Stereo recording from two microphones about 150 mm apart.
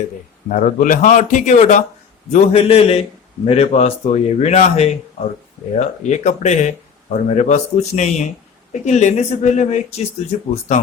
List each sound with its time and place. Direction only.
0.4 s a man's voice: 60° left (ahead or behind)